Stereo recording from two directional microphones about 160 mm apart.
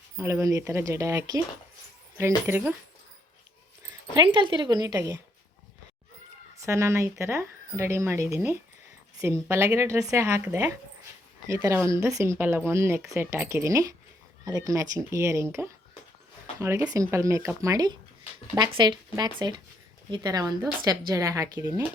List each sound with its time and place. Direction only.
0.2 s speech: 15° right (ahead or behind)
4.1 s speech: 30° right (ahead or behind)
6.6 s speech: 20° right (ahead or behind)